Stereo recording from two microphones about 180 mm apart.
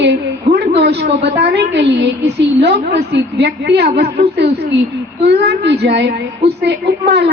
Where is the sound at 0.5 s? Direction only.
65° right (ahead or behind).